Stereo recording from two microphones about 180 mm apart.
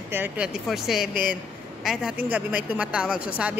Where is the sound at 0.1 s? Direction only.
10° right (ahead or behind).